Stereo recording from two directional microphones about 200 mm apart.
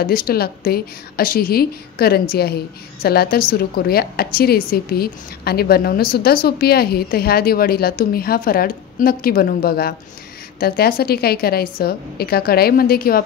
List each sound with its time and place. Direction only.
0.0 s a woman's voice: 50° left (ahead or behind)